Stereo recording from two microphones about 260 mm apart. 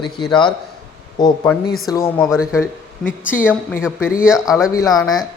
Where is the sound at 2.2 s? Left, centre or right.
Centre.